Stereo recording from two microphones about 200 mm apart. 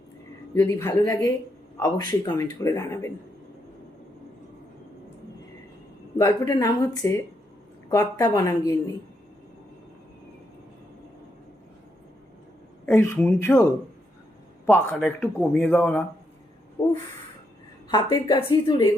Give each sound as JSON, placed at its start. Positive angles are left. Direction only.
{"t": 0.5, "sound": "speech", "side_deg": 15}
{"t": 6.1, "sound": "speech", "side_deg": 15}
{"t": 12.8, "sound": "speech", "side_deg": 10}
{"t": 14.7, "sound": "speech", "side_deg": 10}
{"t": 17.8, "sound": "a woman's voice", "side_deg": 20}